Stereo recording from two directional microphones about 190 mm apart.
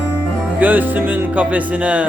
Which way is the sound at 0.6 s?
10° right (ahead or behind).